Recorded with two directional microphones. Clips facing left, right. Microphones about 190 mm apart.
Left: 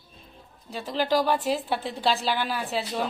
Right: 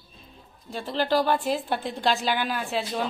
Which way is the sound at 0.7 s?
5° left (ahead or behind).